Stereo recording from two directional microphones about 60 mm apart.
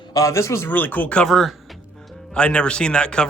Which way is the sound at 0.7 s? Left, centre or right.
Left.